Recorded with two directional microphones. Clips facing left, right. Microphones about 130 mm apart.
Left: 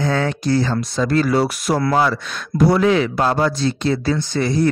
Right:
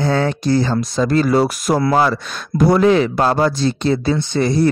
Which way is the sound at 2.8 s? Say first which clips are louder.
Right 3 dB; 35° right (ahead or behind).